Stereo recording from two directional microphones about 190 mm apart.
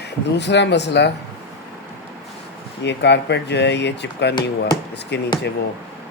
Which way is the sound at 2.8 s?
65° left (ahead or behind).